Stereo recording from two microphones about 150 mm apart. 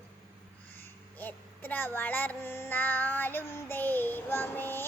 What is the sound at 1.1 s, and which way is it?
Child singing, 10° left (ahead or behind).